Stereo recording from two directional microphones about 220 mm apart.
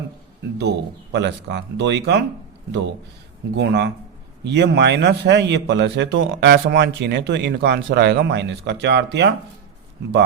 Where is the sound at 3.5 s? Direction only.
50° right (ahead or behind).